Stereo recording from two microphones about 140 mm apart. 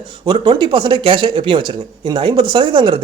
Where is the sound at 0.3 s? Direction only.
40° right (ahead or behind).